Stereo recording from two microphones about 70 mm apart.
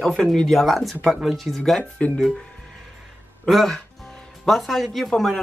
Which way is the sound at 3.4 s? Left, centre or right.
Centre.